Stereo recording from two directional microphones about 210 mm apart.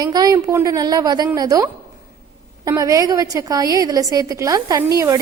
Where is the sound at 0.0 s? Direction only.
20° right (ahead or behind).